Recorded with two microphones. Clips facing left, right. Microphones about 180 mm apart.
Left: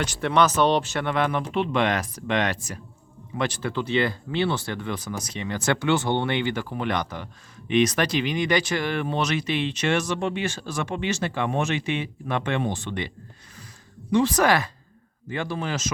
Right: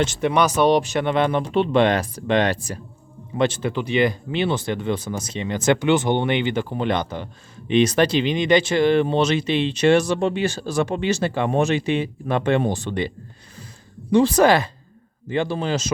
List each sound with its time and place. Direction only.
0.0 s speech: 25° right (ahead or behind)
0.3 s speech: 10° right (ahead or behind); by 13.1 s 35° right (ahead or behind)
14.1 s speech: 30° right (ahead or behind)